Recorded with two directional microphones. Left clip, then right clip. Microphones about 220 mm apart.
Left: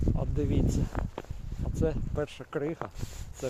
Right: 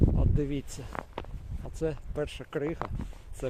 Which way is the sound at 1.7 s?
Centre (ahead or behind).